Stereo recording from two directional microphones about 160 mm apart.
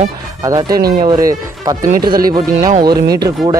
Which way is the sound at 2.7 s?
25° right (ahead or behind).